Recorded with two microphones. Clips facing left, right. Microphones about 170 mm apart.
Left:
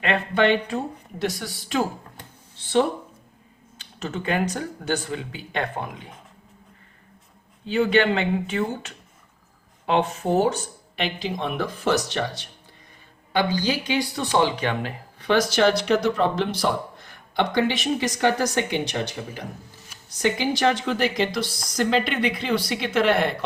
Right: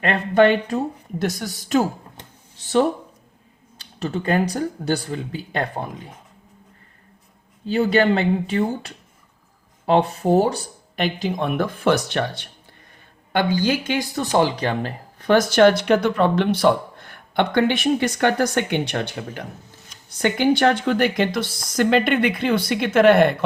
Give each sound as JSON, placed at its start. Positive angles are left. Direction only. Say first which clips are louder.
{"t": 0.0, "sound": "speech", "louder": "right 5 dB", "side_deg": -40}
{"t": 2.6, "sound": "a sound", "louder": "right 2 dB", "side_deg": -40}
{"t": 3.8, "sound": "speech", "louder": "right 5 dB", "side_deg": -35}
{"t": 7.7, "sound": "speech", "louder": "right 2 dB", "side_deg": -35}